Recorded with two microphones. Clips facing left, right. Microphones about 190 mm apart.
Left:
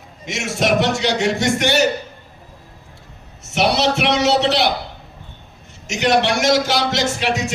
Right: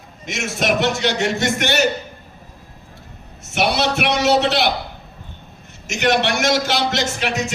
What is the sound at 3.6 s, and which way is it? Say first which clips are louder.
Music: left 2 dB; 55° right (ahead or behind).